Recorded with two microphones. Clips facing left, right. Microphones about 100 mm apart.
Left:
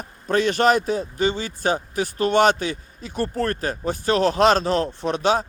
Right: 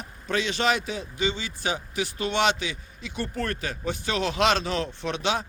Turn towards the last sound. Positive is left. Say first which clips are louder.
# left 7 dB
turn(degrees=40)  # may be behind; listen again after turning